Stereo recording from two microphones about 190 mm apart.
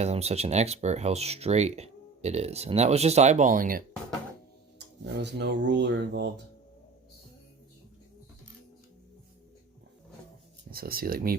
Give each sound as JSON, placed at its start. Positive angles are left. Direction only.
{"t": 0.0, "sound": "speech", "side_deg": -35}
{"t": 5.2, "sound": "speech", "side_deg": -65}
{"t": 10.7, "sound": "speech", "side_deg": -50}